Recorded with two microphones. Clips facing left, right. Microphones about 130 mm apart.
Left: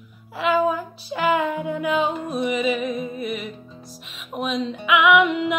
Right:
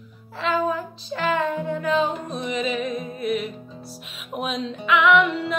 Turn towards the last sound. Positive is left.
turn(degrees=15)  # may be behind; listen again after turning